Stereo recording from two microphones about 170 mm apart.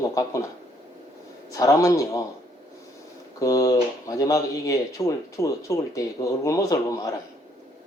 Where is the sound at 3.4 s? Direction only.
20° left (ahead or behind).